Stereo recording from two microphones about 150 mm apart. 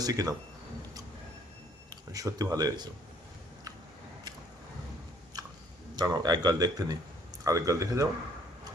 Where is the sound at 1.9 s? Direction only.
25° right (ahead or behind).